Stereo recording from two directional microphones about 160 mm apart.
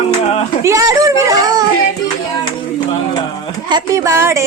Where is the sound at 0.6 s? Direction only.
20° right (ahead or behind).